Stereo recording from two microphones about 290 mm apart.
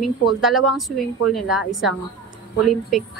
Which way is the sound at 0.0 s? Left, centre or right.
Centre.